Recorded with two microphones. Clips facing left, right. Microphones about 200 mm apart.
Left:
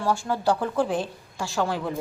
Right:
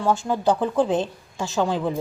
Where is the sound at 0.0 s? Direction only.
20° right (ahead or behind).